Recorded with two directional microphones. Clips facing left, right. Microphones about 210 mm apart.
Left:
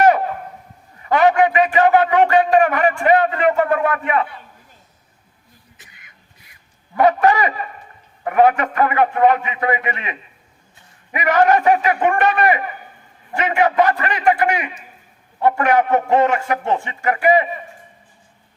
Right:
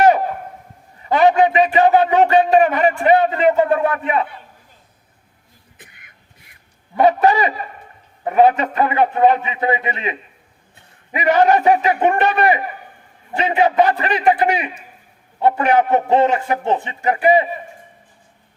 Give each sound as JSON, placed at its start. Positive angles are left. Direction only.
{"t": 1.0, "sound": "a man's voice", "side_deg": -30}
{"t": 5.7, "sound": "a sound", "side_deg": -55}
{"t": 6.9, "sound": "a man's voice", "side_deg": -25}